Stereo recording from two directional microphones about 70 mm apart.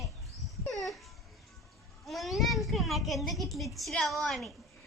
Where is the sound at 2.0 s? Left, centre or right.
Centre.